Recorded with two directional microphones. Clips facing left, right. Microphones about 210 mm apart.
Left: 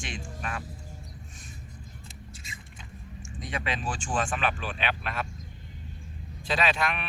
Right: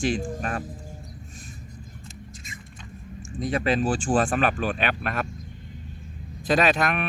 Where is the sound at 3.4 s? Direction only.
40° right (ahead or behind).